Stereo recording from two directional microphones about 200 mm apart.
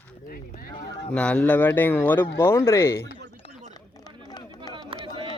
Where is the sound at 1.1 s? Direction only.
5° left (ahead or behind).